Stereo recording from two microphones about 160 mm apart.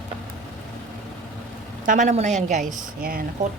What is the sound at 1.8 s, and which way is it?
A woman's voice, 50° right (ahead or behind).